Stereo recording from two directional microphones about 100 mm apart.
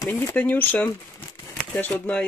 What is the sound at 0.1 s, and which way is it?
Speech, 20° left (ahead or behind).